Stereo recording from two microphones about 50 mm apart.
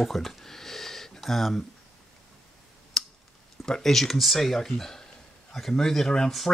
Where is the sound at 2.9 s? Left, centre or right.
Centre.